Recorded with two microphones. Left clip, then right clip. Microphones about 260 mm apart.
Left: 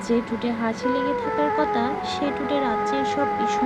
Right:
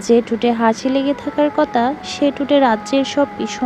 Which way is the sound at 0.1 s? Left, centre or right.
Right.